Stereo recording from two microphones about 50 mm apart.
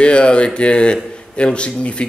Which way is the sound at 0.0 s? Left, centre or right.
Left.